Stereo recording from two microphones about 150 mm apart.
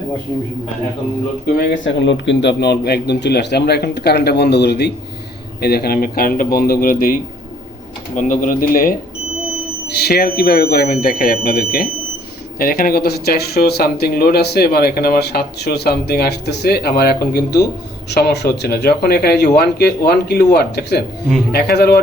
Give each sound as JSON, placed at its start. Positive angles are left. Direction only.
{"t": 1.5, "sound": "speech", "side_deg": 80}
{"t": 8.1, "sound": "speech", "side_deg": 60}
{"t": 9.8, "sound": "speech", "side_deg": 90}
{"t": 12.5, "sound": "speech", "side_deg": 75}